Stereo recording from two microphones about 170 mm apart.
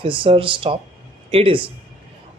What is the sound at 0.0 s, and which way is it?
A man's voice, 30° right (ahead or behind).